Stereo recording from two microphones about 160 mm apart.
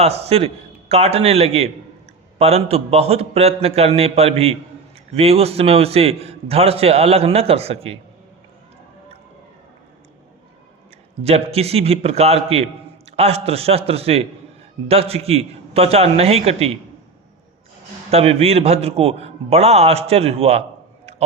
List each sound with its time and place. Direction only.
0.0 s a man's voice: 40° right (ahead or behind)
11.2 s a man's voice: 40° right (ahead or behind)
18.1 s a man's voice: 40° right (ahead or behind)
21.1 s a sound: 40° right (ahead or behind)